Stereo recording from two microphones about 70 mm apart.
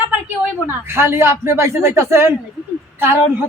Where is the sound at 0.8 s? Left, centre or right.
Right.